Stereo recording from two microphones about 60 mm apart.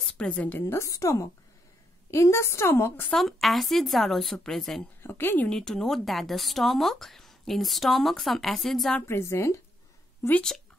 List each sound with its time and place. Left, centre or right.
0.2 s a woman's voice: left
0.7 s a woman's voice: left
2.7 s a woman's voice: left
3.1 s speech: centre
5.0 s a woman's voice: left
5.5 s speech: centre
9.0 s a woman's voice: left